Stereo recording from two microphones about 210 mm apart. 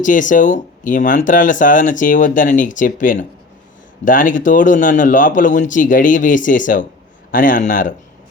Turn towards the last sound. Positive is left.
turn(degrees=40)  # may be behind; listen again after turning